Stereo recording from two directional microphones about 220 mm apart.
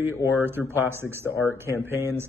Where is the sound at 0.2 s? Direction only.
10° right (ahead or behind).